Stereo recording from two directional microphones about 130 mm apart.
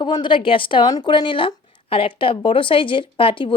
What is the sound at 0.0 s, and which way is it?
Speech, 35° left (ahead or behind).